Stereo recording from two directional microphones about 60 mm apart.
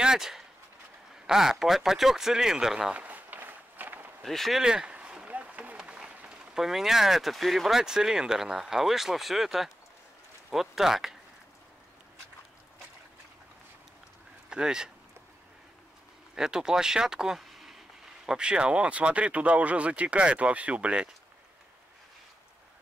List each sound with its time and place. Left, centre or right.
0.0 s a sound: centre
1.2 s speech: centre
3.0 s walk: right
4.2 s speech: centre
4.6 s speech: centre
4.9 s a sound: centre
5.9 s speech: centre
14.5 s speech: centre
16.3 s speech: centre